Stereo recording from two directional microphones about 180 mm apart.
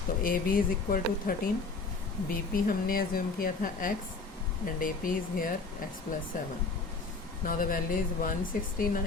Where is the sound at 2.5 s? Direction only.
50° left (ahead or behind).